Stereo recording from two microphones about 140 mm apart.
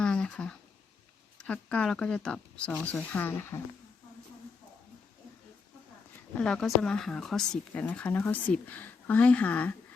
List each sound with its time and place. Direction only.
0.0 s a sound: 10° left (ahead or behind)
1.4 s speech: 5° left (ahead or behind)
6.3 s speech: 5° left (ahead or behind)